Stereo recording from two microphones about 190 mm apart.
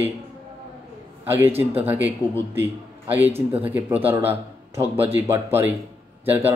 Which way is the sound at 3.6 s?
10° right (ahead or behind).